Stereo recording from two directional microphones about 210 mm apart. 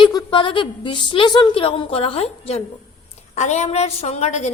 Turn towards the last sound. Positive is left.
turn(degrees=30)  # may be behind; listen again after turning